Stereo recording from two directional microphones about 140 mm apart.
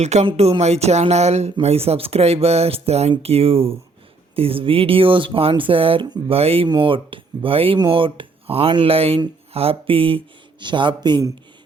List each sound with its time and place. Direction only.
0.0 s speech: 55° right (ahead or behind); by 11.3 s 35° right (ahead or behind)